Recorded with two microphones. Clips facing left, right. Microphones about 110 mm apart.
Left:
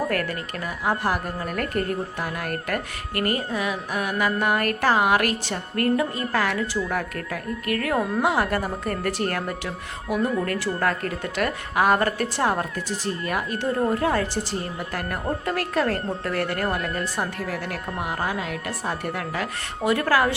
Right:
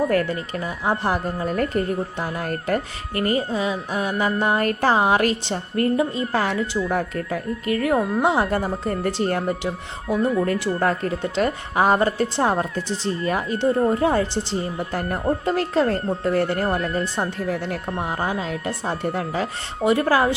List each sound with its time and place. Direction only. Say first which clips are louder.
0.1 s speech: right 5 dB; 25° right (ahead or behind)